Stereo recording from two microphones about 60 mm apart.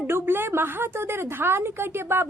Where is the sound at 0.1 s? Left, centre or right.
Right.